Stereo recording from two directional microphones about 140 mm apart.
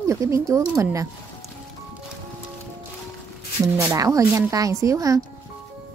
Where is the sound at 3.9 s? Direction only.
25° right (ahead or behind).